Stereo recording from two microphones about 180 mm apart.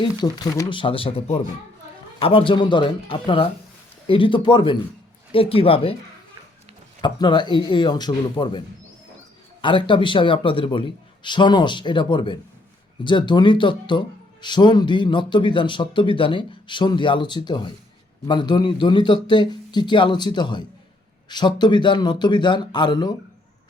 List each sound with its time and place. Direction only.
0.0 s speech: 25° left (ahead or behind)
7.0 s speech: 25° left (ahead or behind)